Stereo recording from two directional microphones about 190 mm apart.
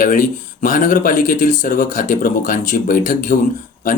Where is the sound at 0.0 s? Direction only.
45° left (ahead or behind).